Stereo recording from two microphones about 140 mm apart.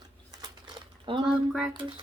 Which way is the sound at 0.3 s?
30° right (ahead or behind).